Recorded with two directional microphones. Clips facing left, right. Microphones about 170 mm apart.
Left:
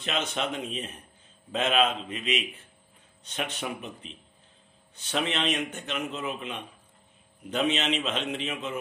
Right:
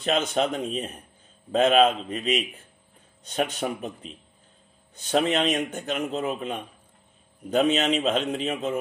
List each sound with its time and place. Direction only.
0.0 s speech: 40° right (ahead or behind)